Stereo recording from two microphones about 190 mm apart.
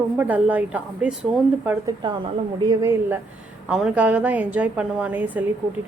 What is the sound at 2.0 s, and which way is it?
A woman's voice, 25° right (ahead or behind).